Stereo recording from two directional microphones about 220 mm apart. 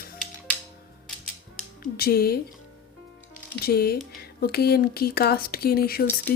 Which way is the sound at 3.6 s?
45° left (ahead or behind).